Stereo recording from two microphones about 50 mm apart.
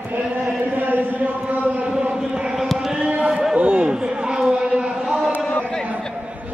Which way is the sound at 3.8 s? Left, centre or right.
Centre.